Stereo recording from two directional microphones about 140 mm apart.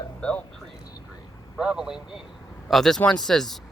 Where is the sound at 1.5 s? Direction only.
5° right (ahead or behind).